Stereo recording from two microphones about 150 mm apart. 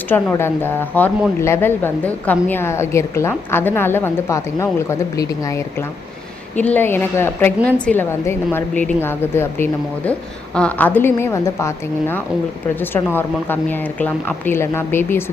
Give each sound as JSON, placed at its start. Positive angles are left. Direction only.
{"t": 0.1, "sound": "a woman's voice", "side_deg": 15}